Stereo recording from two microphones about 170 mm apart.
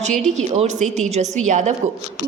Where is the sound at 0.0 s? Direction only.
45° right (ahead or behind).